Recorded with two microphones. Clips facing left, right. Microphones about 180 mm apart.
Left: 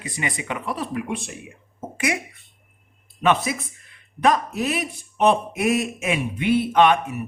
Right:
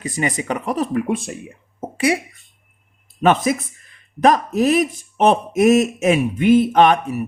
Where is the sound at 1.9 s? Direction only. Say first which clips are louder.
Right 7 dB; 30° right (ahead or behind).